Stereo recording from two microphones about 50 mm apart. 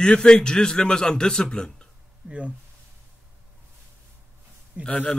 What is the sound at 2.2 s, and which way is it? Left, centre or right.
Speech, right.